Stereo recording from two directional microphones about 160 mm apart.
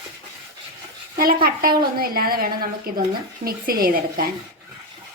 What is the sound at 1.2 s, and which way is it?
A woman's voice, 65° right (ahead or behind).